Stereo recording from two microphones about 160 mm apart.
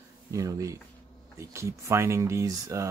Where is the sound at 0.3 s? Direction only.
20° right (ahead or behind).